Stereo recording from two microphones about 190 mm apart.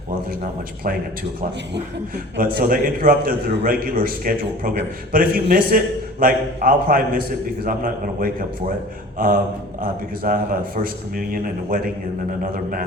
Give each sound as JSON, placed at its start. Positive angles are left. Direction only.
{"t": 2.4, "sound": "a man's voice", "side_deg": -50}
{"t": 11.7, "sound": "a man's voice", "side_deg": -45}